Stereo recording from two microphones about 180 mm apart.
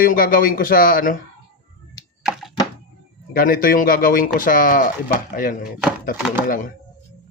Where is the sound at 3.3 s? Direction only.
55° left (ahead or behind).